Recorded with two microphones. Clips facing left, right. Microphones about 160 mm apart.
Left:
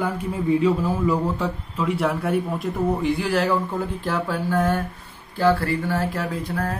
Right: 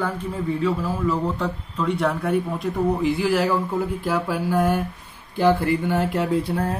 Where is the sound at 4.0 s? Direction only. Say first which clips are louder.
Right 1 dB; 10° right (ahead or behind).